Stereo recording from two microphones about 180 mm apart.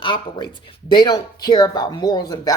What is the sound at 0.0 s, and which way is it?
Speech, 25° left (ahead or behind).